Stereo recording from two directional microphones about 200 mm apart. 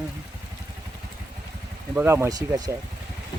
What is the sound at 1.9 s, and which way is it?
Speech, 10° right (ahead or behind).